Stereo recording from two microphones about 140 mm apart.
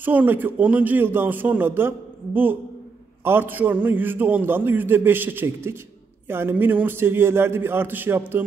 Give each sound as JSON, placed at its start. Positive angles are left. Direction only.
{"t": 0.0, "sound": "a man's voice", "side_deg": -15}